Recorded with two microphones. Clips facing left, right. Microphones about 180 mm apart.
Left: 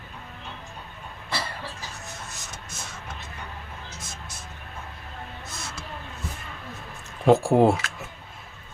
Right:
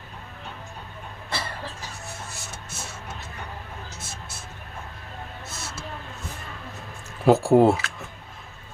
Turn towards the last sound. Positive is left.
turn(degrees=0)  # may be behind; listen again after turning